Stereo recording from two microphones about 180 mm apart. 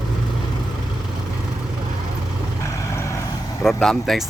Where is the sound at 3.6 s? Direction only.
Centre (ahead or behind).